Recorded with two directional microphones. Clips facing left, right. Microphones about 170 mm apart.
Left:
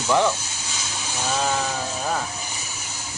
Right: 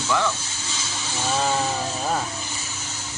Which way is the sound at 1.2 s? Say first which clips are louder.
Right 1 dB; 15° left (ahead or behind).